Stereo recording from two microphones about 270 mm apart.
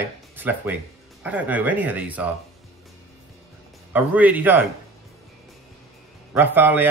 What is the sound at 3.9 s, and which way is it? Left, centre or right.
Speech, centre.